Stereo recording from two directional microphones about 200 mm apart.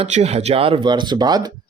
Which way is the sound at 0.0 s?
30° right (ahead or behind).